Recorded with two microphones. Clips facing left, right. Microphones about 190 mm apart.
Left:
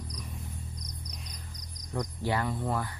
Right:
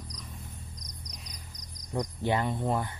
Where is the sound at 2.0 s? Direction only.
20° right (ahead or behind).